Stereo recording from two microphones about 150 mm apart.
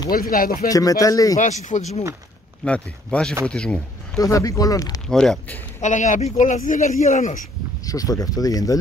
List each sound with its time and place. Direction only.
0.1 s speech: 75° left (ahead or behind)
0.7 s speech: 25° left (ahead or behind)
1.4 s speech: 55° left (ahead or behind)
2.6 s speech: 5° left (ahead or behind)
4.2 s speech: 20° left (ahead or behind)
5.0 s speech: 5° left (ahead or behind)
5.8 s speech: 55° left (ahead or behind)
7.8 s speech: 25° left (ahead or behind)